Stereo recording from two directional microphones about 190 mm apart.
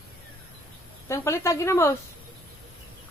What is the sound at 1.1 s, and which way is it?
Speech, 15° left (ahead or behind).